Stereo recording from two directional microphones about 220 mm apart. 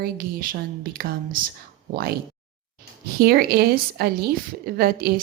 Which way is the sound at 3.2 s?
45° right (ahead or behind).